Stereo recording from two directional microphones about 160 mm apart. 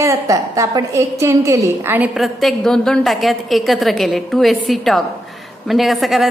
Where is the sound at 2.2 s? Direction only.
Centre (ahead or behind).